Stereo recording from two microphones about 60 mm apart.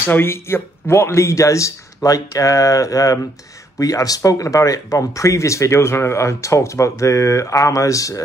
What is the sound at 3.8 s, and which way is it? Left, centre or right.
Speech, left.